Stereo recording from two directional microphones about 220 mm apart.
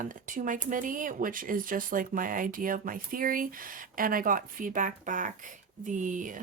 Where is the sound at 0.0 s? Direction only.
35° right (ahead or behind).